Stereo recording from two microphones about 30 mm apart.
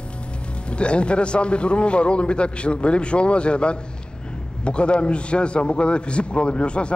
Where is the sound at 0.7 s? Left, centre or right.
Left.